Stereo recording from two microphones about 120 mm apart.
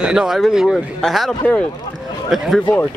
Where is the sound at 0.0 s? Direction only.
5° right (ahead or behind).